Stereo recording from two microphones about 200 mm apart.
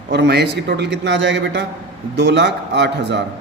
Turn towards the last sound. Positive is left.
turn(degrees=-60)  # may be behind; listen again after turning